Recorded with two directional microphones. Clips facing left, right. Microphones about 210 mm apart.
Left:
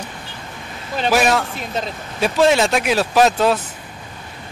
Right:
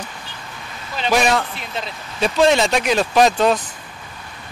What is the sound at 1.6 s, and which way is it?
Speech, 40° left (ahead or behind).